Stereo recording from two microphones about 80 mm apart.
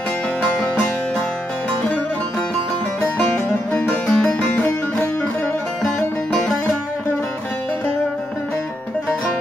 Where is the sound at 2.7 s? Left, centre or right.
Centre.